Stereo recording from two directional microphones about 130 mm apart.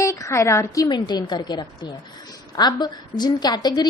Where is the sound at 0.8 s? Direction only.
35° left (ahead or behind).